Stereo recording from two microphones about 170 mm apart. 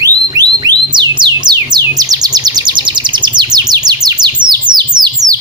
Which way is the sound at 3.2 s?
25° right (ahead or behind).